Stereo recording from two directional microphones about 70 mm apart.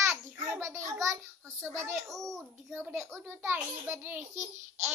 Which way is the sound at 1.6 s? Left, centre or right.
Right.